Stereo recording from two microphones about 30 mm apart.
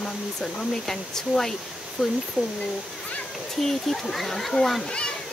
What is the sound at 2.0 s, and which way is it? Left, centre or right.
Speech, right.